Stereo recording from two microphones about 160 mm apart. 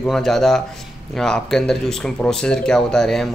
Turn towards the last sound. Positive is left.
turn(degrees=5)  # may be behind; listen again after turning